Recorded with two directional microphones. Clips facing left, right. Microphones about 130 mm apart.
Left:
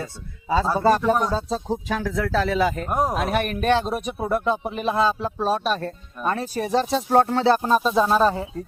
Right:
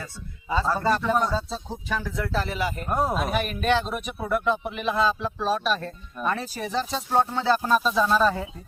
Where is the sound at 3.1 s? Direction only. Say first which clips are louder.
Left 3 dB; 65° left (ahead or behind).